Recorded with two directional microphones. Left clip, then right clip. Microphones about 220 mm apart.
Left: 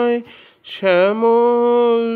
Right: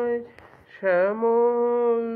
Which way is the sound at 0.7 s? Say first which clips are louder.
Left 7 dB; 45° left (ahead or behind).